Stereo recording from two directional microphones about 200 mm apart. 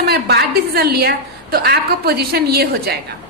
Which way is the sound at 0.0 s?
55° right (ahead or behind).